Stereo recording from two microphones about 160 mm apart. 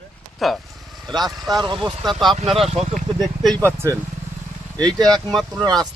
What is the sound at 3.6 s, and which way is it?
Speech, 15° right (ahead or behind).